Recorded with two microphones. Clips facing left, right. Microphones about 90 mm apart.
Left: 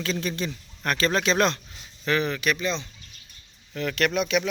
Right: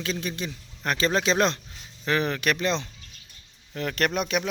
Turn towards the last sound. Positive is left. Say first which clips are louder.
# left 2 dB
turn(degrees=-40)  # may be behind; listen again after turning